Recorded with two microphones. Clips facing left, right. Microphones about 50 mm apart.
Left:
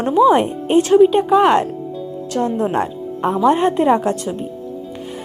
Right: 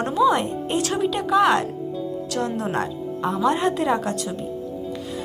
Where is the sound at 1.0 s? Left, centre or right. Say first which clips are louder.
Left 6 dB; left.